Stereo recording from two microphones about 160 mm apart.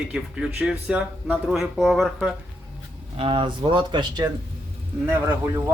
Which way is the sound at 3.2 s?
35° right (ahead or behind).